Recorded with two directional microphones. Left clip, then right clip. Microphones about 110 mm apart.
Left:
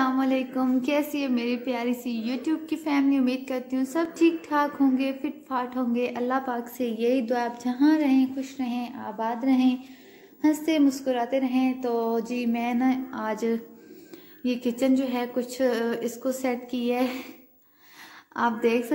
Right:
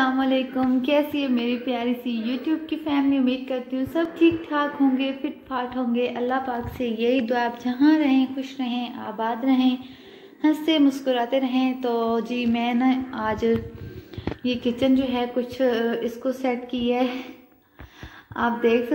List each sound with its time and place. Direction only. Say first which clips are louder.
0.0 s a woman's voice: right 3 dB; 30° left (ahead or behind)
18.3 s a woman's voice: right 3 dB; 30° left (ahead or behind)